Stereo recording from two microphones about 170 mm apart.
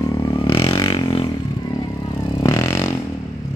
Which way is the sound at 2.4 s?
20° left (ahead or behind).